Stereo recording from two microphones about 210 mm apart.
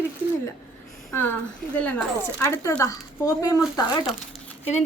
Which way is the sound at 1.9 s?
15° left (ahead or behind).